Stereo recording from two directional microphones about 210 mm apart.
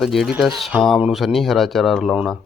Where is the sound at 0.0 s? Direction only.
Centre (ahead or behind).